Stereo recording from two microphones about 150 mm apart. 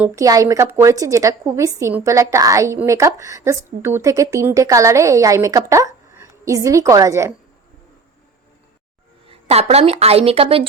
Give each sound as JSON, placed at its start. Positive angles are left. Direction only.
{"t": 0.2, "sound": "a woman's voice", "side_deg": -25}
{"t": 9.3, "sound": "a woman's voice", "side_deg": -45}